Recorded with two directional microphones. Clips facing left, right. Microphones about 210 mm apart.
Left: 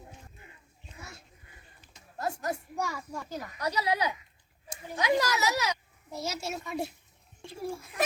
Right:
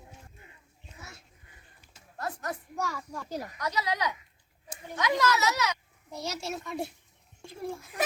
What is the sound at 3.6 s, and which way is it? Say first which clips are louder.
Speech: left 3 dB; 30° left (ahead or behind).